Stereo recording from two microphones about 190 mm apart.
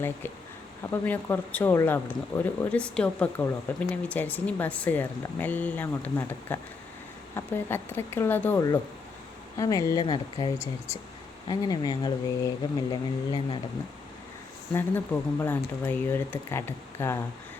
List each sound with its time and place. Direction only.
0.9 s speech: 10° left (ahead or behind); by 13.6 s 25° left (ahead or behind)
14.7 s speech: 10° left (ahead or behind)